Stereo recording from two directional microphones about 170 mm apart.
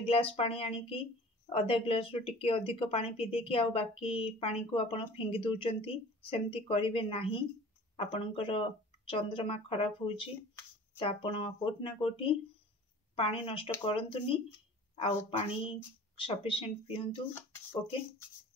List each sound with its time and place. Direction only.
0.0 s speech: 35° left (ahead or behind)